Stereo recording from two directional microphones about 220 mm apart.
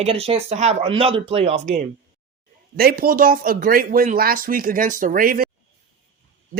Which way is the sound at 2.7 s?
40° right (ahead or behind).